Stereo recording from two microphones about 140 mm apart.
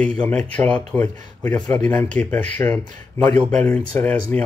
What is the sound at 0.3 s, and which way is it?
Speech, 10° left (ahead or behind).